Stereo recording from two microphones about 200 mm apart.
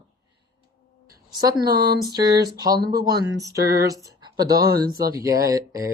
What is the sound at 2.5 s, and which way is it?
Speech, 20° right (ahead or behind).